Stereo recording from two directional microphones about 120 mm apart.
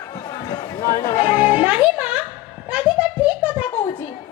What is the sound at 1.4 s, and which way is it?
Music, 10° right (ahead or behind).